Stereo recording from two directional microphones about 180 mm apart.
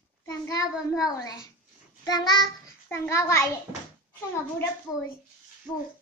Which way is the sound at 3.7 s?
35° left (ahead or behind).